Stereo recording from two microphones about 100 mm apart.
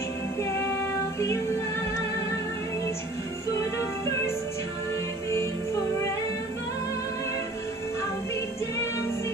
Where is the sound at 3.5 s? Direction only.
25° left (ahead or behind).